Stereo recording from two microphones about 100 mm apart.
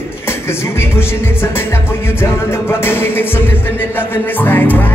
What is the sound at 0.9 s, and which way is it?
Music, 25° left (ahead or behind).